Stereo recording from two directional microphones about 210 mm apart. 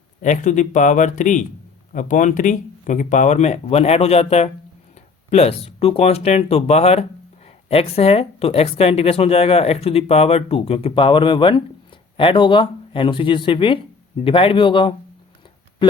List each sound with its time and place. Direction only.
0.2 s speech: 35° left (ahead or behind)